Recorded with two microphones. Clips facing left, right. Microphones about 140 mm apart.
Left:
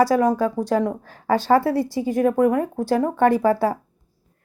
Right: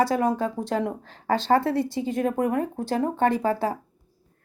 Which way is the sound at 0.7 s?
45° left (ahead or behind).